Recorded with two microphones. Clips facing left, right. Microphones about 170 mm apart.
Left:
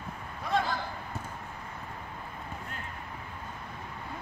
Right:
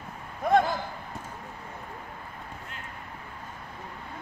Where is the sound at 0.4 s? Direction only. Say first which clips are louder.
Right 8 dB; 50° right (ahead or behind).